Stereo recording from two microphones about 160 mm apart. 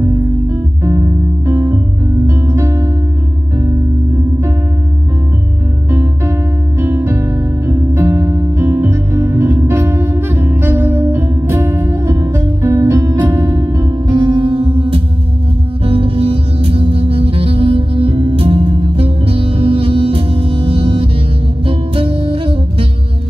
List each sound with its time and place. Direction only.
2.2 s music: 15° right (ahead or behind)
5.9 s music: 15° right (ahead or behind); by 22.8 s 35° right (ahead or behind)